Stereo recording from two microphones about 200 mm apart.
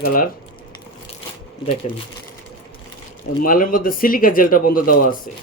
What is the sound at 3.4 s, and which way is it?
Speech, 45° left (ahead or behind).